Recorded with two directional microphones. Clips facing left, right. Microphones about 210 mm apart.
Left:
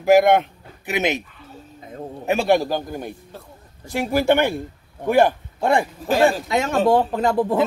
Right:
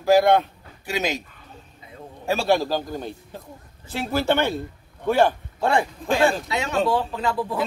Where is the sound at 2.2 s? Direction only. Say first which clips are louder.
Left 3 dB; 15° left (ahead or behind).